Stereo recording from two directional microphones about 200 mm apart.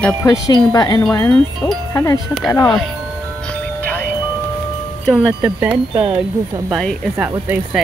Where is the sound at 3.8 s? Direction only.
10° left (ahead or behind).